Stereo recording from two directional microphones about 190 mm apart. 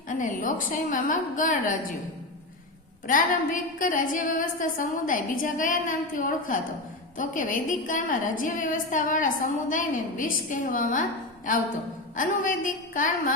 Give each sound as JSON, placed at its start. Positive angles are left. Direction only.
{"t": 0.1, "sound": "a woman's voice", "side_deg": 45}
{"t": 3.1, "sound": "a woman's voice", "side_deg": 45}
{"t": 12.1, "sound": "a woman's voice", "side_deg": 45}